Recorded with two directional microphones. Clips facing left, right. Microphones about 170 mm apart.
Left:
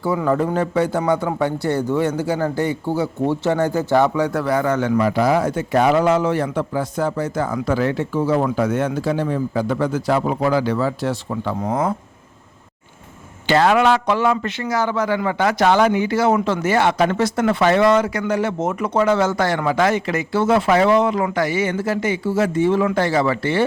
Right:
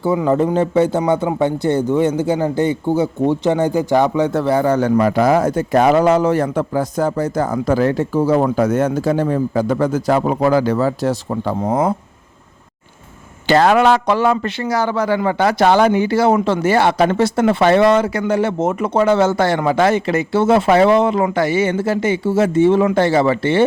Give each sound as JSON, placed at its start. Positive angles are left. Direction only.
{"t": 0.0, "sound": "a man's voice", "side_deg": -25}
{"t": 13.5, "sound": "a man's voice", "side_deg": -40}